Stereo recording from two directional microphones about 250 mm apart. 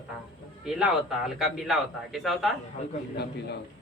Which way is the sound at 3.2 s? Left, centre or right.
Left.